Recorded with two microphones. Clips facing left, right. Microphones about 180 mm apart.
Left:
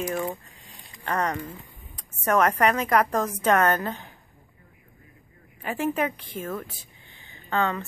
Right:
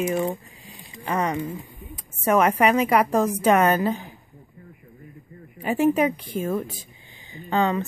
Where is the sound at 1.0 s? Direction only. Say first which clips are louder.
Right 3 dB; 5° right (ahead or behind).